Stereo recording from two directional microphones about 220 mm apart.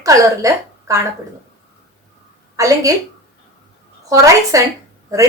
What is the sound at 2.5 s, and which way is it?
Speech, 15° right (ahead or behind).